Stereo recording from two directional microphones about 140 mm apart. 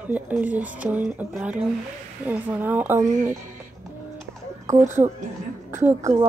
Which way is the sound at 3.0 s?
65° right (ahead or behind).